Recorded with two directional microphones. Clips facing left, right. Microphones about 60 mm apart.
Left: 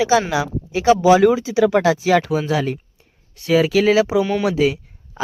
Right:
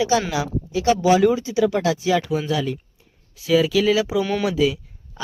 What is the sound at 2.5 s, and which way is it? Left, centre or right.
Speech, left.